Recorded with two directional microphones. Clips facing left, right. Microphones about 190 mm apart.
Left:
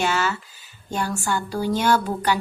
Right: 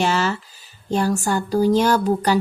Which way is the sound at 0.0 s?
35° right (ahead or behind).